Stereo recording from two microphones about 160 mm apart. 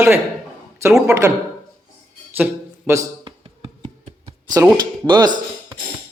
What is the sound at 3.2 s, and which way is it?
Music, 35° right (ahead or behind).